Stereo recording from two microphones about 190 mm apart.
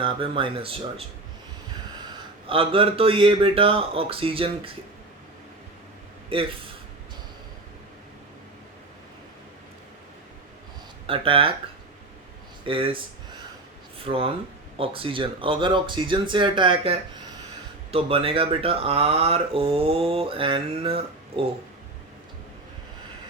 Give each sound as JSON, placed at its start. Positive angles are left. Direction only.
{"t": 0.0, "sound": "speech", "side_deg": -25}
{"t": 2.5, "sound": "speech", "side_deg": -30}
{"t": 6.3, "sound": "speech", "side_deg": -30}
{"t": 11.0, "sound": "speech", "side_deg": -30}
{"t": 12.6, "sound": "speech", "side_deg": -30}
{"t": 14.0, "sound": "speech", "side_deg": -30}